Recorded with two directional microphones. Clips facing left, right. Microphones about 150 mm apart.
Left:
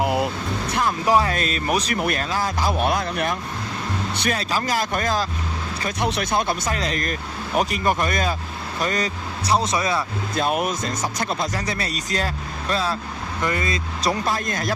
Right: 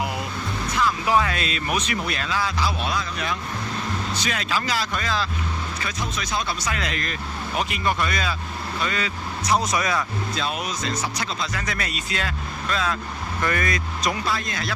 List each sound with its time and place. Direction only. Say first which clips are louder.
0.0 s vehicle: left 6 dB; 55° left (ahead or behind)
1.1 s speech: left 2 dB; 40° left (ahead or behind); by 3.3 s 55° left (ahead or behind)
4.3 s speech: left 4 dB; 40° left (ahead or behind)
6.0 s speech: left 7 dB; 65° left (ahead or behind)
6.7 s speech: left 3 dB; 40° left (ahead or behind)
10.3 s speech: left 8 dB; 50° left (ahead or behind)
11.5 s speech: left 3 dB; 30° left (ahead or behind)
13.4 s speech: even; 20° left (ahead or behind)
14.3 s speech: left 3 dB; 45° left (ahead or behind)